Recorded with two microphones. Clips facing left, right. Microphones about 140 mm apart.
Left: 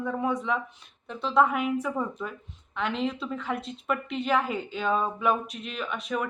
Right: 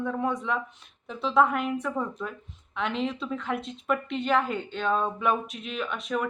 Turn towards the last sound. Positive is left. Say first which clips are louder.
# right 1 dB
turn(degrees=0)  # may be behind; listen again after turning